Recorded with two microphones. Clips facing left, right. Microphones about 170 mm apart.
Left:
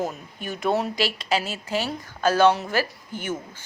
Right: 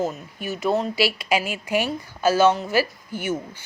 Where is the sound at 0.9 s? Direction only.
10° right (ahead or behind).